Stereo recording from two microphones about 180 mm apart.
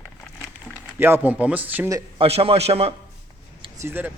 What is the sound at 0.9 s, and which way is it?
A man's voice, 10° right (ahead or behind).